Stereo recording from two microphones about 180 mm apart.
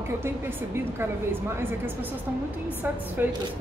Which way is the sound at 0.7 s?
15° right (ahead or behind).